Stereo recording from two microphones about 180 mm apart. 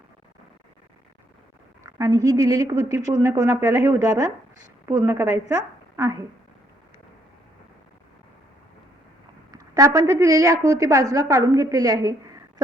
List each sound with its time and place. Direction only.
1.8 s a woman's voice: 15° right (ahead or behind)
9.5 s a woman's voice: 20° right (ahead or behind)